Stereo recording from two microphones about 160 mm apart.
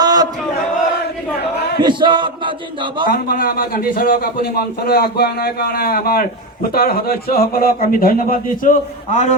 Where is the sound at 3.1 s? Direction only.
65° left (ahead or behind).